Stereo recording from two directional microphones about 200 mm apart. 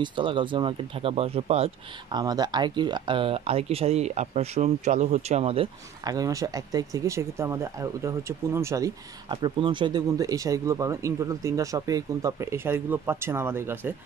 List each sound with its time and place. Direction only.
0.0 s speech: 25° right (ahead or behind)